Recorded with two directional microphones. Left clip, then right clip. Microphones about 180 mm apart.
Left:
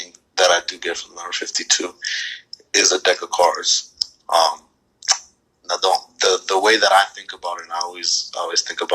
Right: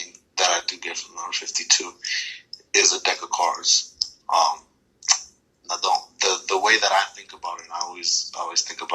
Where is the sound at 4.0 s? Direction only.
50° left (ahead or behind).